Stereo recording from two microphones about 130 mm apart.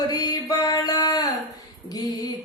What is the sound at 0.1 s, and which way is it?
Music, 30° left (ahead or behind).